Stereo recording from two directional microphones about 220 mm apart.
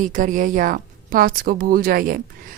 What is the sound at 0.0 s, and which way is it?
A woman's voice, 35° right (ahead or behind).